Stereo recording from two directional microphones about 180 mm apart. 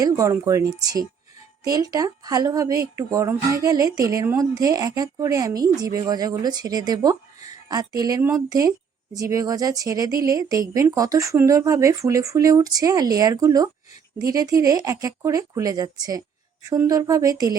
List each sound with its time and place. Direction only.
0.0 s a woman's voice: 15° right (ahead or behind)